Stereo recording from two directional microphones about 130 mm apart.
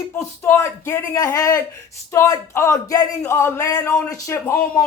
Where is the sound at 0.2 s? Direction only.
20° left (ahead or behind).